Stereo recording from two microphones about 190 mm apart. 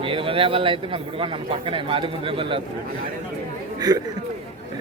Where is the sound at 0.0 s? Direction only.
30° right (ahead or behind).